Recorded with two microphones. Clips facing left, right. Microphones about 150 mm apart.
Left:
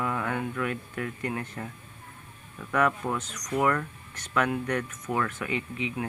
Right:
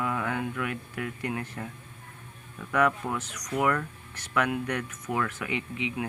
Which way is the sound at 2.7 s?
10° right (ahead or behind).